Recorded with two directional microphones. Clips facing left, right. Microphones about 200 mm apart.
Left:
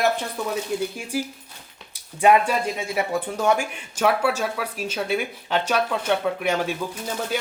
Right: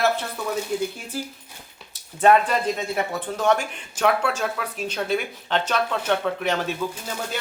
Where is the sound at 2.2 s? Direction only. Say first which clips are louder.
Even; 10° left (ahead or behind).